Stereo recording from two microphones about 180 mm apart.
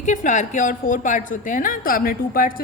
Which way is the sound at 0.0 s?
45° left (ahead or behind).